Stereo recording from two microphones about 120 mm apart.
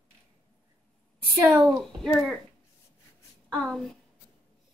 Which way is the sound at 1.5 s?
15° right (ahead or behind).